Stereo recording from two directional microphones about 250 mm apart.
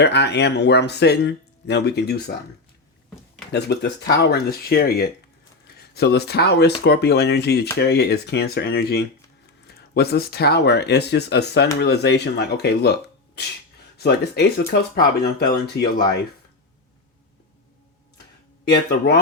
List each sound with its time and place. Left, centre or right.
0.0 s speech: left
3.5 s speech: left
18.9 s speech: left